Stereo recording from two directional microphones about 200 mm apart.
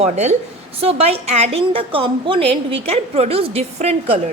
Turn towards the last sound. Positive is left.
turn(degrees=-30)  # may be behind; listen again after turning